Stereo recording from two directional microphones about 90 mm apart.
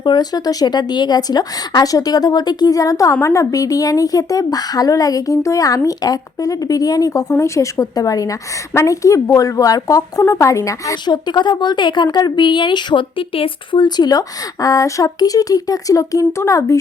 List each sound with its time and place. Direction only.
0.0 s speech: 50° left (ahead or behind)
11.0 s speech: 55° left (ahead or behind); by 16.7 s 35° left (ahead or behind)